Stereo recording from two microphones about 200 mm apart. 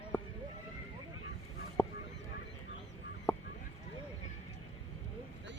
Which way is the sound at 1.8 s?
10° left (ahead or behind).